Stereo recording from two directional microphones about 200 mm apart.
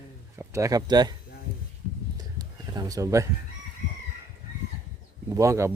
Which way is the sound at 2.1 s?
20° right (ahead or behind).